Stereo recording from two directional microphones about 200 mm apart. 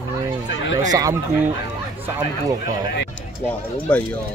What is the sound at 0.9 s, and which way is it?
Speech, 15° right (ahead or behind).